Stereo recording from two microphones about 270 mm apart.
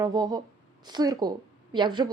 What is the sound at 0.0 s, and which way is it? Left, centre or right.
A woman's voice, centre.